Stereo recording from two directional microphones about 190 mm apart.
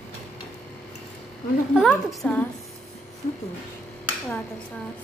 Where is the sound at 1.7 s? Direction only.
Centre (ahead or behind).